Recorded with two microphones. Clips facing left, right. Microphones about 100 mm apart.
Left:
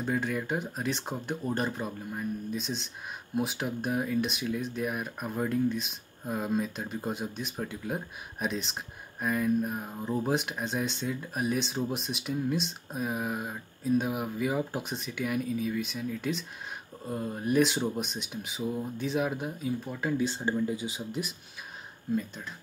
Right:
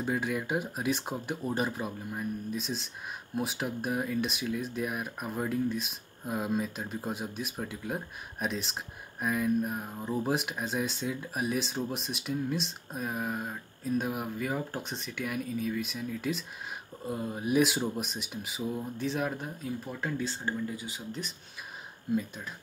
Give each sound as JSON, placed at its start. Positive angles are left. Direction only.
{"t": 0.0, "sound": "speech", "side_deg": -5}
{"t": 20.2, "sound": "speech", "side_deg": 20}
{"t": 22.1, "sound": "speech", "side_deg": -5}